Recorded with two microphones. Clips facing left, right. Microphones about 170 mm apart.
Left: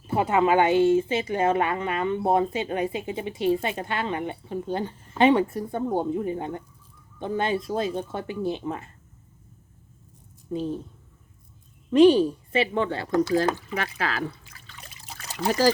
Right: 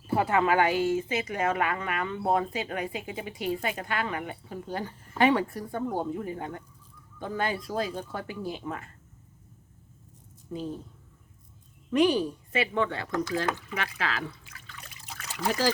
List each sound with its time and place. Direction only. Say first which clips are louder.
0.1 s a woman's voice: left 3 dB; 20° left (ahead or behind)
10.5 s a woman's voice: left 6 dB; 25° left (ahead or behind)
11.9 s speech: left 8 dB; 30° left (ahead or behind)